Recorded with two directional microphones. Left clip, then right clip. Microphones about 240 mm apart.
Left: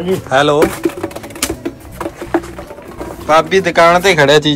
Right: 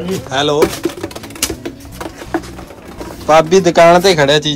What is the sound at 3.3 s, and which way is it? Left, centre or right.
Speech, right.